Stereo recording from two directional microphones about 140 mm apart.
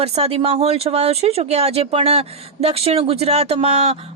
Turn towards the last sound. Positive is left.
turn(degrees=-45)  # may be behind; listen again after turning